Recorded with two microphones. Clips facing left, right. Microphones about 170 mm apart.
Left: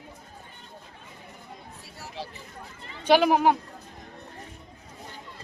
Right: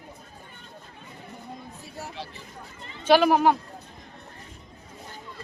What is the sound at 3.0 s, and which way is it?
Speech, 15° left (ahead or behind).